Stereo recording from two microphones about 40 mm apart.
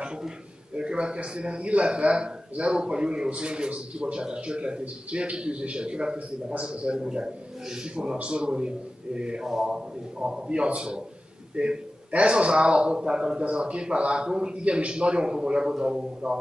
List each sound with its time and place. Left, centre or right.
0.7 s a man's voice: right